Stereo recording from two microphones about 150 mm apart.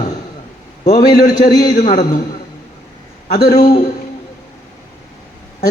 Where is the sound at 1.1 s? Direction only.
90° left.